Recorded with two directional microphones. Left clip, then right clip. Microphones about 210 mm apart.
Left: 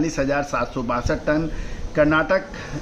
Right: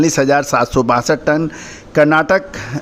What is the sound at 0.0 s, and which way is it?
A man's voice, 45° right (ahead or behind).